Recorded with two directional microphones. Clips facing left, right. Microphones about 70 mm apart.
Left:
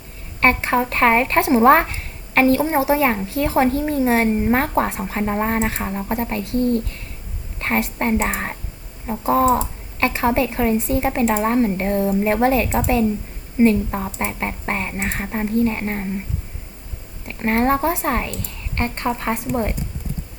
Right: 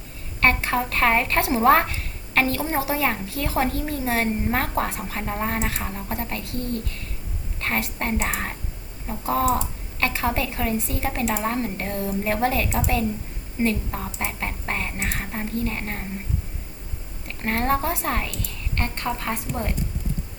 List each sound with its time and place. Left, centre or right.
0.3 s a woman's voice: left
7.6 s a woman's voice: left
17.4 s a woman's voice: left